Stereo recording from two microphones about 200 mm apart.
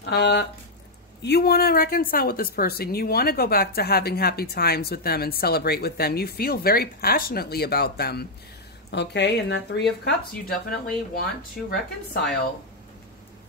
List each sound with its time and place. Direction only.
0.1 s a woman's voice: 60° left (ahead or behind)
11.7 s a woman's voice: 50° left (ahead or behind)